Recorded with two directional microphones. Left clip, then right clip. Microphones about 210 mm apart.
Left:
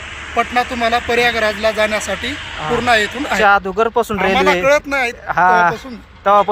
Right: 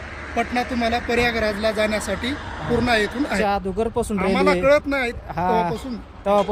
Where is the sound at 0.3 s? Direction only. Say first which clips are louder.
Left 7 dB; 5° right (ahead or behind).